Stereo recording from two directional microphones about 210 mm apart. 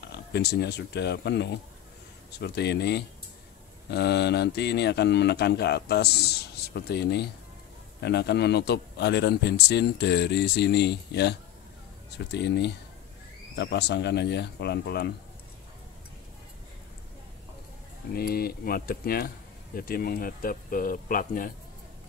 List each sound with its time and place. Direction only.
0.0 s speech: 50° left (ahead or behind)
18.1 s speech: 45° left (ahead or behind)